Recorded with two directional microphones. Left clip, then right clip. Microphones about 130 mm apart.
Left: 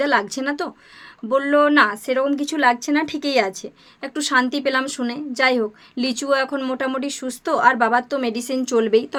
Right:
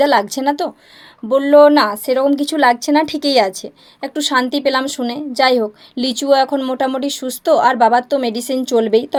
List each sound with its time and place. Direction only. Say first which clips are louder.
0.0 s a woman's voice: right 6 dB; 25° right (ahead or behind)